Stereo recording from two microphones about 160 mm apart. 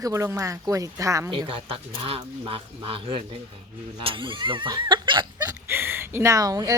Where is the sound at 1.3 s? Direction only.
30° right (ahead or behind).